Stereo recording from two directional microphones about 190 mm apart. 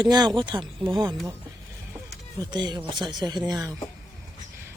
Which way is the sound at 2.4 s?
25° right (ahead or behind).